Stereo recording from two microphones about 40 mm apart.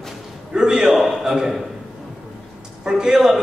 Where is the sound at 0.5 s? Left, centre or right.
Centre.